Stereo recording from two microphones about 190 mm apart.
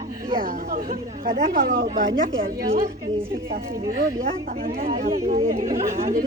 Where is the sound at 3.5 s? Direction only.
50° right (ahead or behind).